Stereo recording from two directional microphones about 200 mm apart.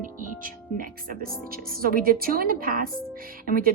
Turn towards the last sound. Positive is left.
turn(degrees=-45)  # may be behind; listen again after turning